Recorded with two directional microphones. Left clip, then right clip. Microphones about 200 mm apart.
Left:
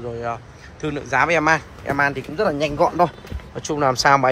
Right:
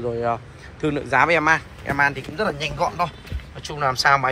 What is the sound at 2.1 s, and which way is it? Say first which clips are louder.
Speech: left 4 dB; 30° left (ahead or behind).